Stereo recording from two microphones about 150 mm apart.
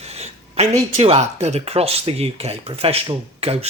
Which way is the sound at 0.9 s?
45° right (ahead or behind).